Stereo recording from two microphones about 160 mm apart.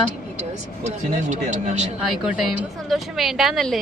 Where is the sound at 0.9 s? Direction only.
50° right (ahead or behind).